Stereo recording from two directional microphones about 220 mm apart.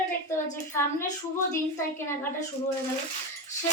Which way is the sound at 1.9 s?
10° left (ahead or behind).